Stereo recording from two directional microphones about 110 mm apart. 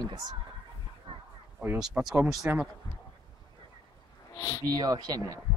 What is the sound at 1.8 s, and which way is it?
Speech, 5° right (ahead or behind).